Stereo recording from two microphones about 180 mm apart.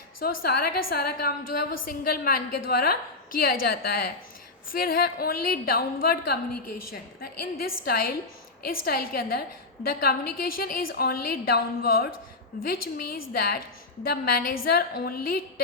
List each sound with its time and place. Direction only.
0.3 s a woman's voice: 60° left (ahead or behind)